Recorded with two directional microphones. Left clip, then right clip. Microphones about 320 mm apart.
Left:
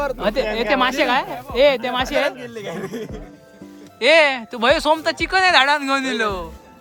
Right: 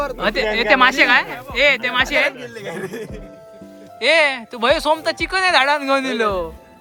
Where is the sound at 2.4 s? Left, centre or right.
Centre.